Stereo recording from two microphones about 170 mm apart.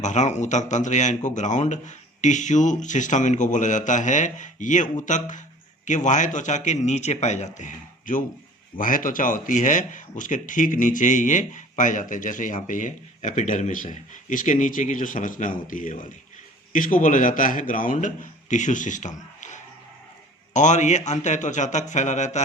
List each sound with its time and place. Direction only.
0.0 s speech: 45° left (ahead or behind)